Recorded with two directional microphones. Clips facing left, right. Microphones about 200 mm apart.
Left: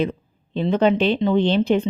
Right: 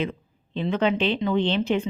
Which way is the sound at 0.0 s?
40° left (ahead or behind).